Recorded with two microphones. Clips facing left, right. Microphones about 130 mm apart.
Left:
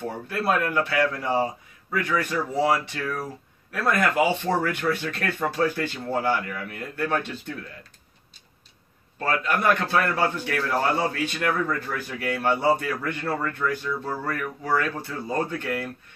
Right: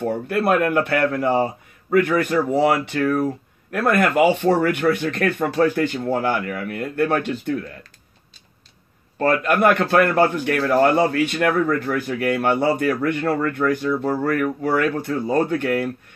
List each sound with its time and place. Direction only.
0.3 s a man's voice: 60° right (ahead or behind)
9.2 s a man's voice: 60° right (ahead or behind)